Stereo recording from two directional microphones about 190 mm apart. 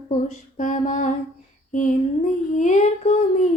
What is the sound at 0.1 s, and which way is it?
Music, 40° left (ahead or behind).